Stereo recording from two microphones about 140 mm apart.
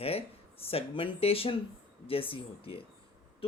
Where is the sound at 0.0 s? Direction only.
45° left (ahead or behind).